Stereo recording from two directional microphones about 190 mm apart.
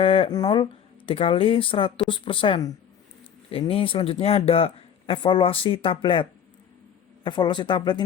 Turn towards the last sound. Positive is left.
turn(degrees=25)  # may be behind; listen again after turning